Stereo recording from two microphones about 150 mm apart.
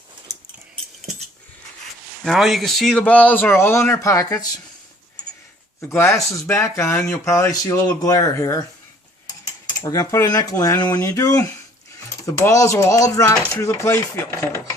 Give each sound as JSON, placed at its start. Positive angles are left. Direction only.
{"t": 2.2, "sound": "a man's voice", "side_deg": 0}
{"t": 6.5, "sound": "speech", "side_deg": 20}
{"t": 9.8, "sound": "speech", "side_deg": 25}